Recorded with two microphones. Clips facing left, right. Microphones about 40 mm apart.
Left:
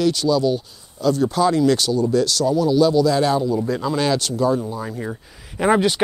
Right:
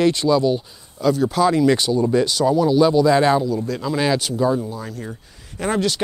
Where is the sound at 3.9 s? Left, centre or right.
Centre.